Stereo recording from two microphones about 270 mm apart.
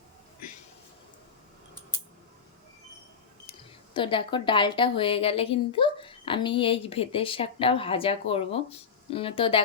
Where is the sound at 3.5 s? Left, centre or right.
Centre.